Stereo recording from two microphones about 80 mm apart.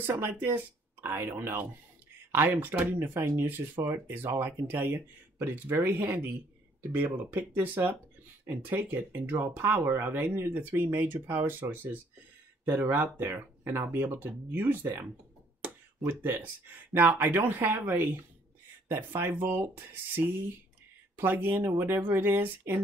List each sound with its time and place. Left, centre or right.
0.0 s speech: right